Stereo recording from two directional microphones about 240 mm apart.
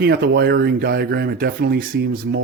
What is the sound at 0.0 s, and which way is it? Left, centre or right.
Speech, right.